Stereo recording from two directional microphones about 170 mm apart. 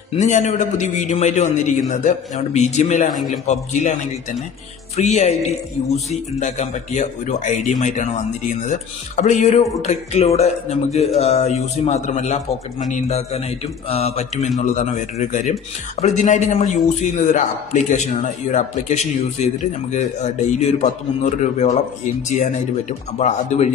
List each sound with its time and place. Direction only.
0.2 s a man's voice: 45° left (ahead or behind)